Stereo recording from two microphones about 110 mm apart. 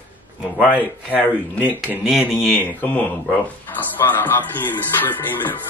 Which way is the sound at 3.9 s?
15° left (ahead or behind).